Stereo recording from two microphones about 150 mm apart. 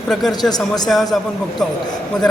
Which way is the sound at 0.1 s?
Centre (ahead or behind).